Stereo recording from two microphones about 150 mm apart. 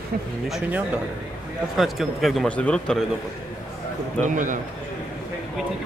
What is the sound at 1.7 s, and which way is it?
A man's voice, centre (ahead or behind).